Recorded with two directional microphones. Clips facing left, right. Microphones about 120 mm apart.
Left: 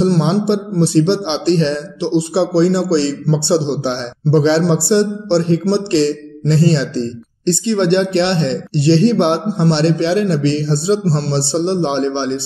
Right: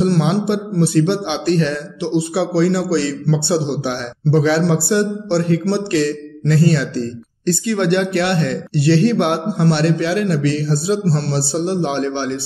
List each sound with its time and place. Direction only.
0.0 s a man's voice: 25° left (ahead or behind)